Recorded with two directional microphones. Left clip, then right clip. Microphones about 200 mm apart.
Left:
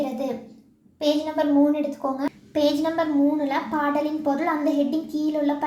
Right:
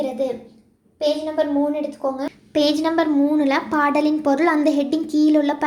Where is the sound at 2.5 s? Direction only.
30° right (ahead or behind).